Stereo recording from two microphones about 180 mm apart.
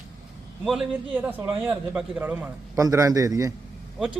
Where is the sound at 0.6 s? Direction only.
Centre (ahead or behind).